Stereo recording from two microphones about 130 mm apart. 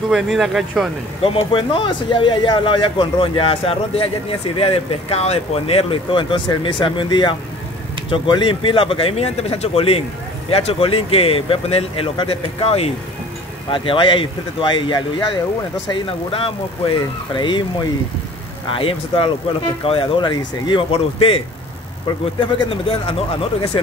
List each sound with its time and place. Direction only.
0.1 s speech: centre (ahead or behind)
1.2 s speech: 45° left (ahead or behind)
22.4 s speech: 45° left (ahead or behind)